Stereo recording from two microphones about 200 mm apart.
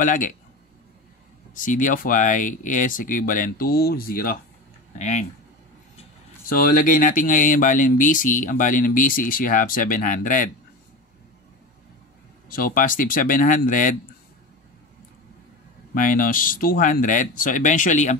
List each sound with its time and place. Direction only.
0.0 s speech: 40° left (ahead or behind)
1.5 s speech: 40° left (ahead or behind)
4.9 s speech: 35° left (ahead or behind)
6.5 s speech: 45° left (ahead or behind)
12.4 s speech: 45° left (ahead or behind)
15.9 s speech: 45° left (ahead or behind)